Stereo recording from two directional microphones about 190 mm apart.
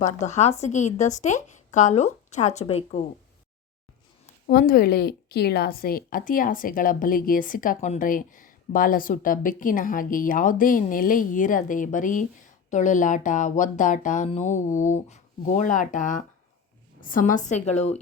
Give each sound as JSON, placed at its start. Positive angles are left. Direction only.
{"t": 0.0, "sound": "speech", "side_deg": 40}
{"t": 4.4, "sound": "a woman's voice", "side_deg": 50}